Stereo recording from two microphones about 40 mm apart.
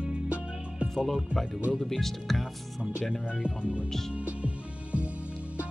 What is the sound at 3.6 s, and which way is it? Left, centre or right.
Music, right.